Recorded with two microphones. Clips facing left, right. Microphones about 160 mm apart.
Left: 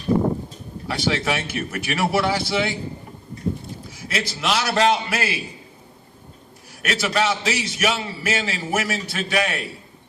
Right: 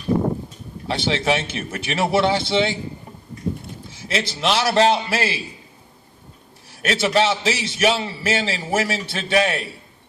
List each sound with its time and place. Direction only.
0.9 s a man's voice: 25° right (ahead or behind)
3.8 s a man's voice: 25° right (ahead or behind)
6.8 s a man's voice: 30° right (ahead or behind)